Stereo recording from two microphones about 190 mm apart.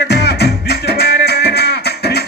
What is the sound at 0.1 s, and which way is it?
Music, 60° left (ahead or behind).